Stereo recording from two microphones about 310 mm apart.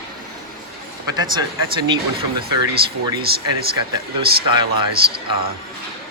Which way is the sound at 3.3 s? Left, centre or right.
Right.